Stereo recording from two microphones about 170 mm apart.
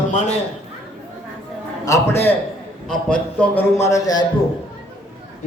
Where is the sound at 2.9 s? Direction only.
5° left (ahead or behind); by 4.3 s 20° left (ahead or behind).